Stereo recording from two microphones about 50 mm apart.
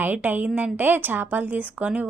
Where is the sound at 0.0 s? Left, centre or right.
Right.